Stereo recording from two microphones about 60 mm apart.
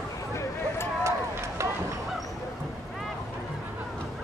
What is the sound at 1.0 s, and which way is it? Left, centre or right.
Run, right.